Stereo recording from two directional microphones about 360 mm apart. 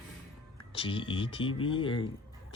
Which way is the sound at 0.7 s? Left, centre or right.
Centre.